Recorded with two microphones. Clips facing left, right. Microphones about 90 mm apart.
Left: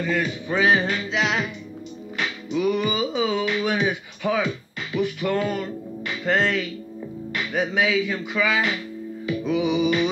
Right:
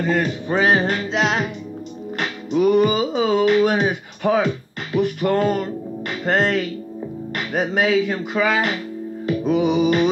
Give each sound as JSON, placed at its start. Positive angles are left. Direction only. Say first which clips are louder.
{"t": 0.0, "sound": "music", "louder": "right 4 dB", "side_deg": -45}